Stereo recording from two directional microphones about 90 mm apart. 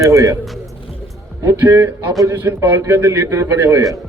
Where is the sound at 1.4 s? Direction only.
25° right (ahead or behind).